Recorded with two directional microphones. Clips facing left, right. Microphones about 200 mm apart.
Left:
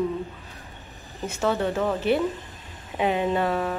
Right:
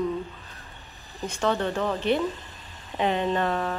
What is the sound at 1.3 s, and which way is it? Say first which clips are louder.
Speech: left 1 dB; 5° left (ahead or behind).